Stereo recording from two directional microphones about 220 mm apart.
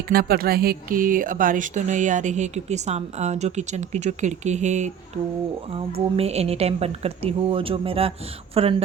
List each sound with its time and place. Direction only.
0.1 s speech: 45° right (ahead or behind)
6.1 s speech: 30° right (ahead or behind)